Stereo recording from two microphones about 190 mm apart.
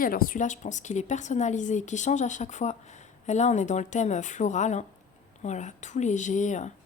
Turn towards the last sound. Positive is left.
turn(degrees=40)  # may be behind; listen again after turning